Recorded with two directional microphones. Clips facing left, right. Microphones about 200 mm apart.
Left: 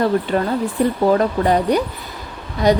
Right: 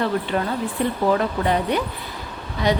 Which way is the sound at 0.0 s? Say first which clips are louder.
Left 5 dB; 40° left (ahead or behind).